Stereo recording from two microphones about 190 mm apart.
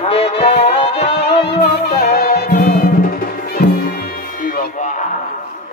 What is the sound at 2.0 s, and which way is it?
Music, 60° left (ahead or behind).